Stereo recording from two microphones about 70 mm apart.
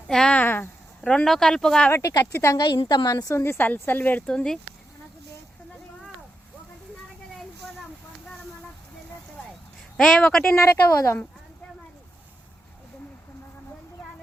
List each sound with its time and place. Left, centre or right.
0.1 s a sound: centre
0.3 s a sound: left
1.0 s speech: centre
2.0 s a woman's voice: left
2.3 s a woman's voice: left
2.6 s a woman's voice: left
3.3 s a woman's voice: left
4.3 s speech: centre
10.0 s speech: centre
10.6 s a woman's voice: left